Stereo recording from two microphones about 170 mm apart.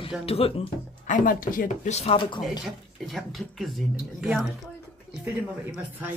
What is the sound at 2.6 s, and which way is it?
A man's voice, centre (ahead or behind).